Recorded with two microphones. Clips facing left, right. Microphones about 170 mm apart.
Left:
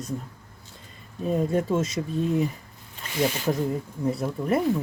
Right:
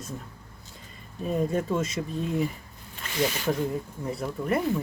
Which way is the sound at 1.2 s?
30° left (ahead or behind).